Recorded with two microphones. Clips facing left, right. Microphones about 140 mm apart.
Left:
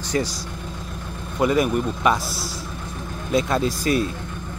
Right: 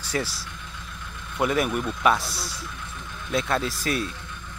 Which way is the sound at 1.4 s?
Centre (ahead or behind).